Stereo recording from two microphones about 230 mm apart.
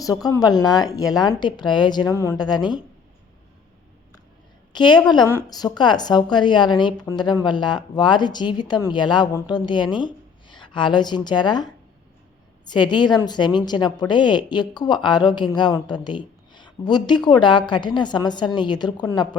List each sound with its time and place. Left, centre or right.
0.0 s a woman's voice: centre
4.7 s a woman's voice: centre
12.7 s a woman's voice: centre